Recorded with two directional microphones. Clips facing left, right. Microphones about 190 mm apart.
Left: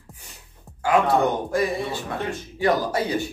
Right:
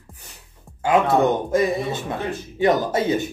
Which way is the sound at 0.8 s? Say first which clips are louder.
Right 2 dB; 20° right (ahead or behind).